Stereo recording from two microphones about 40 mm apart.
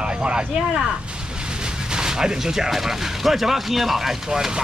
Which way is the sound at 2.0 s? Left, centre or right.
Centre.